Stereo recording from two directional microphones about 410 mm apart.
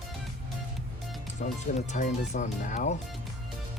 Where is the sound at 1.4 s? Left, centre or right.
Centre.